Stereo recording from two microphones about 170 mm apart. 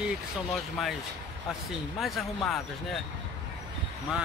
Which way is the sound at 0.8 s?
Centre (ahead or behind).